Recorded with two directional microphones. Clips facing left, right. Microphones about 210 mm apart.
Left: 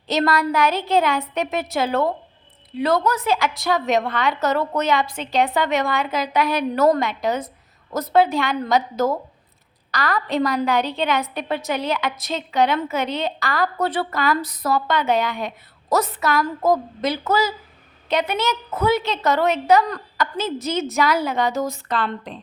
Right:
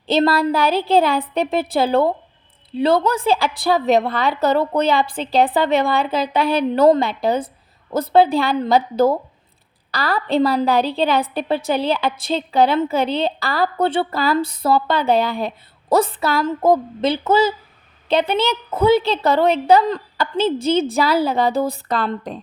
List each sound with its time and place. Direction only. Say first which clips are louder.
0.1 s a woman's voice: right 4 dB; 30° right (ahead or behind)